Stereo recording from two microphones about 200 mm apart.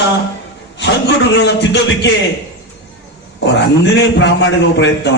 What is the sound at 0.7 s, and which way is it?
Speech, 60° left (ahead or behind).